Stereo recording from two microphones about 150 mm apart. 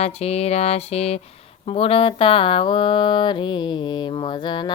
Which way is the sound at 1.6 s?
40° left (ahead or behind).